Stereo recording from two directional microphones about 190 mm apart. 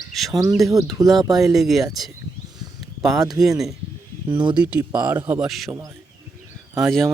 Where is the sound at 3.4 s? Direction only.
Centre (ahead or behind).